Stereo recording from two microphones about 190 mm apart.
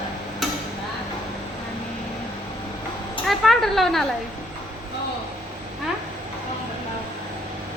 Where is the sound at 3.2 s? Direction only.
Centre (ahead or behind).